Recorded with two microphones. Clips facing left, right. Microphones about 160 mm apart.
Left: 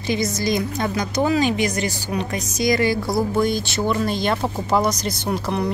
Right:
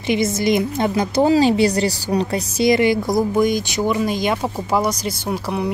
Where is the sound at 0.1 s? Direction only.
25° right (ahead or behind).